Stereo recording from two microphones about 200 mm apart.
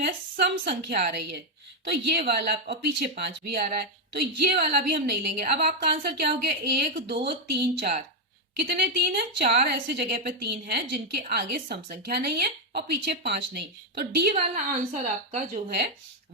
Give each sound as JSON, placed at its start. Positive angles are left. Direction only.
{"t": 0.0, "sound": "a woman's voice", "side_deg": -55}
{"t": 14.3, "sound": "a woman's voice", "side_deg": -30}